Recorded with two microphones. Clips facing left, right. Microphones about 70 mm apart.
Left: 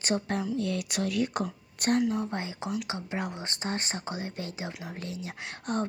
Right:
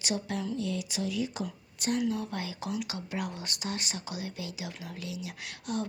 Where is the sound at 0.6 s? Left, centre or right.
Left.